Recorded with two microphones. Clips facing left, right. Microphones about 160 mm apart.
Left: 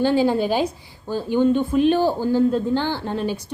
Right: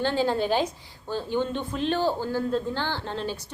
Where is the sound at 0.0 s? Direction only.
10° left (ahead or behind).